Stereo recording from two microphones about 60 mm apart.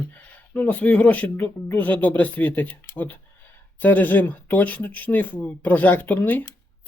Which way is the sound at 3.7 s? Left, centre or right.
Left.